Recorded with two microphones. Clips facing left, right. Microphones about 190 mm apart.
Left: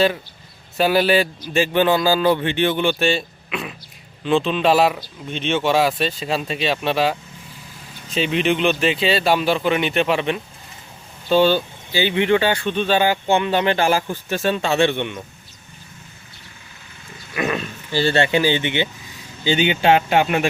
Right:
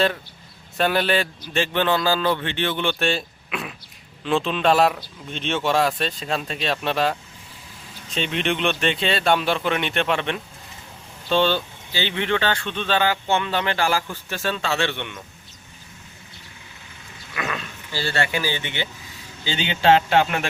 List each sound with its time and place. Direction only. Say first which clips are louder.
0.8 s speech: left 4 dB; 5° left (ahead or behind)
17.3 s speech: left 7 dB; 20° left (ahead or behind)